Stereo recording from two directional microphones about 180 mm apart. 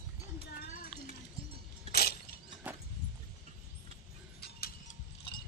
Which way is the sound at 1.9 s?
60° left (ahead or behind).